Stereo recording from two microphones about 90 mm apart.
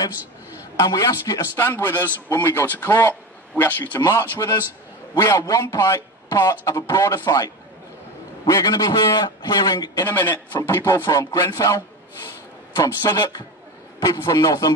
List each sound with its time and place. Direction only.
0.7 s speech: 40° left (ahead or behind)
1.6 s a man's voice: 25° left (ahead or behind); by 10.0 s 45° left (ahead or behind)
10.0 s a man's voice: 25° left (ahead or behind)
11.1 s speech: 40° left (ahead or behind)